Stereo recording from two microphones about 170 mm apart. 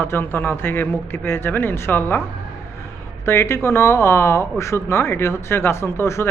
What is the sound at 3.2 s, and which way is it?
Speech, 15° left (ahead or behind).